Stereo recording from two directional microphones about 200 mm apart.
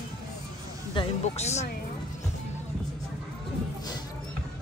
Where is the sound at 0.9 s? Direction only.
35° left (ahead or behind).